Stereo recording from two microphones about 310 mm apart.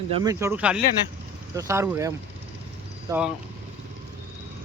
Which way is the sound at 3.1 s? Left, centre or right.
Centre.